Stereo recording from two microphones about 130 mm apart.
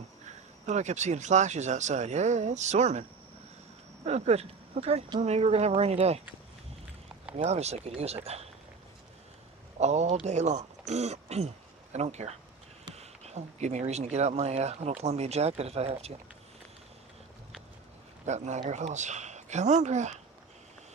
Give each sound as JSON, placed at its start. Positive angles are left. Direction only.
{"t": 0.6, "sound": "speech", "side_deg": -65}
{"t": 4.0, "sound": "speech", "side_deg": -55}
{"t": 7.3, "sound": "speech", "side_deg": -55}
{"t": 9.8, "sound": "speech", "side_deg": -60}
{"t": 18.3, "sound": "speech", "side_deg": -65}